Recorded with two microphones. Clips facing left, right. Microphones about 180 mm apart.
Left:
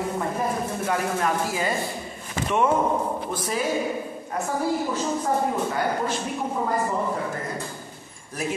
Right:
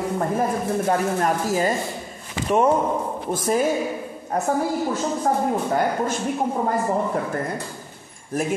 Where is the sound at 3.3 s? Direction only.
45° right (ahead or behind).